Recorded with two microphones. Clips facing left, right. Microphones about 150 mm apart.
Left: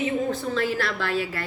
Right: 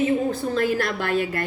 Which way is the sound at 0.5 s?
45° right (ahead or behind).